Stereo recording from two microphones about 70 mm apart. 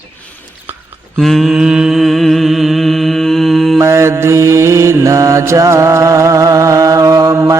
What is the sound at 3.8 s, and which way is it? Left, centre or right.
Mantra, right.